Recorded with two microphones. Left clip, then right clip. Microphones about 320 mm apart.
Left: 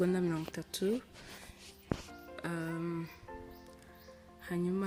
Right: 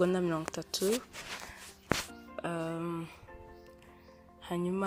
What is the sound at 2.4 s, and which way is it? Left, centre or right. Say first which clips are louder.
Music: right 3 dB; centre.